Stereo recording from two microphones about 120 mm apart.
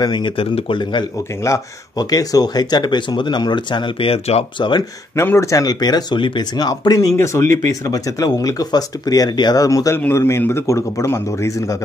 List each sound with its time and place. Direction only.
0.0 s speech: 40° left (ahead or behind)
1.4 s speech: 30° left (ahead or behind); by 4.5 s 55° left (ahead or behind)
4.6 s speech: 40° left (ahead or behind)
5.1 s speech: 25° left (ahead or behind)